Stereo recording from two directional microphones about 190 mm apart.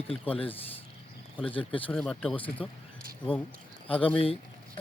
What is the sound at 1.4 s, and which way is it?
Speech, 25° left (ahead or behind).